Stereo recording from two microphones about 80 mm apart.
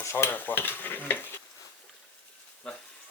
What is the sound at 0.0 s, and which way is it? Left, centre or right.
Stir, left.